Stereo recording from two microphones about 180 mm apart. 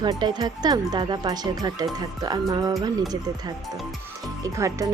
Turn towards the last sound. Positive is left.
turn(degrees=-15)  # may be behind; listen again after turning